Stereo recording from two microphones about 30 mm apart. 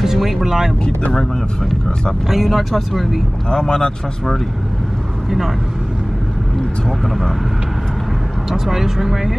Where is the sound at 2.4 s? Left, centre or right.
Centre.